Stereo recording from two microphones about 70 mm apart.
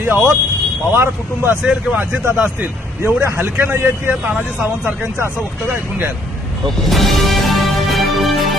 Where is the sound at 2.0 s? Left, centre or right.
Right.